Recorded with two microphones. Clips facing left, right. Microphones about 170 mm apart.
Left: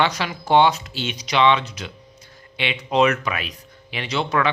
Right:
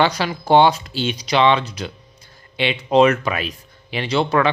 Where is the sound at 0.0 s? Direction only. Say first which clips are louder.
Right 3 dB; 35° right (ahead or behind).